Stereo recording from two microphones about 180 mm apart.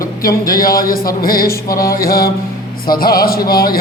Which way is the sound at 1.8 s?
55° left (ahead or behind).